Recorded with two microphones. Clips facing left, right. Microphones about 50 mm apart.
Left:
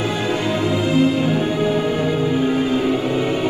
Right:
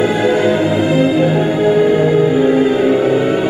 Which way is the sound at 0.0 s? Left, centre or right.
Right.